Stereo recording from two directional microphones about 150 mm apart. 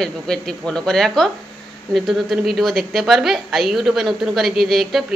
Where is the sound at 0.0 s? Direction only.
5° left (ahead or behind).